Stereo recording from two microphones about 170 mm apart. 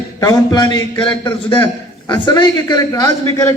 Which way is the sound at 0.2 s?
20° left (ahead or behind).